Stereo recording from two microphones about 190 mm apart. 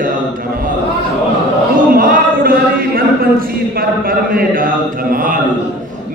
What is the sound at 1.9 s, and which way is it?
A man's voice, 50° right (ahead or behind).